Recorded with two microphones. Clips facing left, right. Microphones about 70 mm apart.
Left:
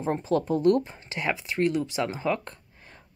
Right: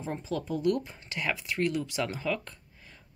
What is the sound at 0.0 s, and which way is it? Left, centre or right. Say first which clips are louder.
Speech: left 8 dB; left.